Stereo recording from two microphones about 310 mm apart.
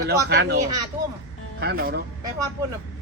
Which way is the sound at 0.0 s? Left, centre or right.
Right.